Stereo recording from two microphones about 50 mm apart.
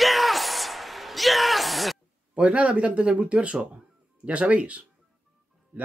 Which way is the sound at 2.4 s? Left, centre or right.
Right.